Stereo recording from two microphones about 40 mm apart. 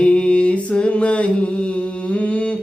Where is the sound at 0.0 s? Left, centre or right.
Left.